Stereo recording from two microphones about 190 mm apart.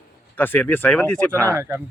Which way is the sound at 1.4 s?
15° right (ahead or behind).